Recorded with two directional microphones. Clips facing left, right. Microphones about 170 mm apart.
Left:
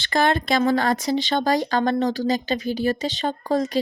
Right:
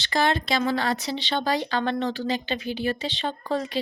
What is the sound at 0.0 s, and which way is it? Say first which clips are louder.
A woman's voice: left 3 dB; 50° left (ahead or behind).